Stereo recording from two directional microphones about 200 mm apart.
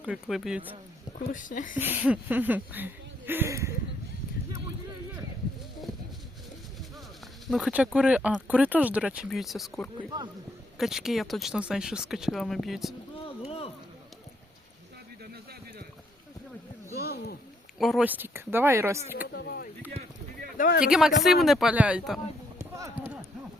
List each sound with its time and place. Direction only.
0.0 s speech: centre (ahead or behind)
1.3 s speech: 40° left (ahead or behind)
1.8 s speech: 10° right (ahead or behind)
7.4 s speech: centre (ahead or behind)
10.1 s speech: 20° right (ahead or behind)
10.8 s speech: centre (ahead or behind)
13.2 s a sound: 30° left (ahead or behind)
17.0 s a sound: 50° left (ahead or behind)
17.7 s speech: centre (ahead or behind)
19.3 s a sound: 50° left (ahead or behind)
20.8 s speech: centre (ahead or behind)
22.8 s clip-clop: 10° right (ahead or behind)